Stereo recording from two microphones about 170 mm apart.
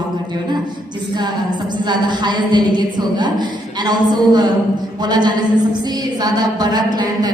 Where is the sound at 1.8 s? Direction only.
25° right (ahead or behind).